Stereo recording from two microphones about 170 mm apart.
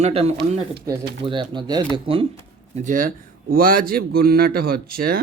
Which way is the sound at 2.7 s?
50° right (ahead or behind).